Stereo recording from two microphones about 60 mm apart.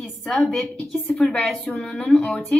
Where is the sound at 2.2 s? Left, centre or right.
Left.